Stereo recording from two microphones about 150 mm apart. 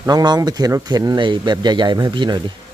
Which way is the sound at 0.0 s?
25° right (ahead or behind).